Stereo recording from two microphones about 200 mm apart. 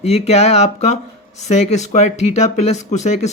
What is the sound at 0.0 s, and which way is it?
Speech, 30° left (ahead or behind).